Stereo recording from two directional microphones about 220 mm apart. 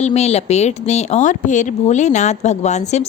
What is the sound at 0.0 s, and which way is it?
A woman's voice, 30° left (ahead or behind).